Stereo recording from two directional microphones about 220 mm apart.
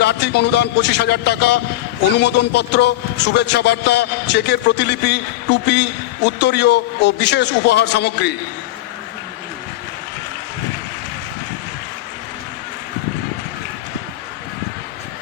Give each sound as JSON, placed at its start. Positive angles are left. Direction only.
{"t": 0.0, "sound": "a man's voice", "side_deg": 50}